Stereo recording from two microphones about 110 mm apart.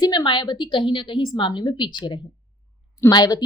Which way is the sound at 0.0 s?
40° left (ahead or behind).